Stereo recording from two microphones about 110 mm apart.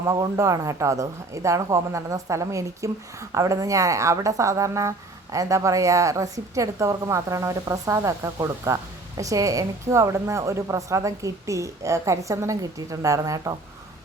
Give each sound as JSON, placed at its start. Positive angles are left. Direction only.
{"t": 0.0, "sound": "a woman's voice", "side_deg": -30}